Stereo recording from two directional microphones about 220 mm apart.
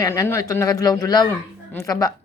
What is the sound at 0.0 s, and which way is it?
Speech, 15° left (ahead or behind).